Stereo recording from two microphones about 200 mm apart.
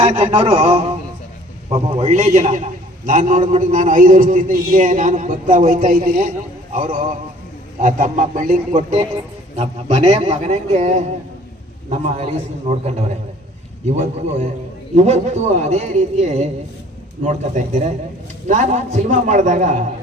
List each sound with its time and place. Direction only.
0.0 s a man's voice: 35° right (ahead or behind)